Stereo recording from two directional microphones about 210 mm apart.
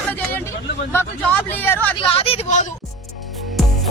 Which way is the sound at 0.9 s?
10° left (ahead or behind).